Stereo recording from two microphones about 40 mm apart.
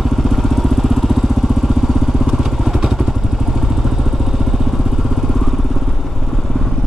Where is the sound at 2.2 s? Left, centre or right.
Centre.